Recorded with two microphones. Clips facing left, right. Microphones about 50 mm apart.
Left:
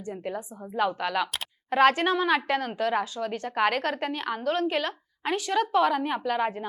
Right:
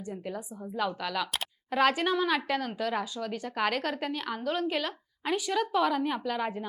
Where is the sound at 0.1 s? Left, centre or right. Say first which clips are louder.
Left 5 dB; centre.